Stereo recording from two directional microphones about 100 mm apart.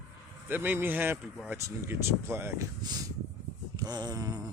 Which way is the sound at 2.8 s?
40° right (ahead or behind).